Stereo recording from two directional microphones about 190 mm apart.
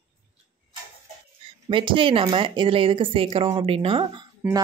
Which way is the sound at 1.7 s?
25° right (ahead or behind).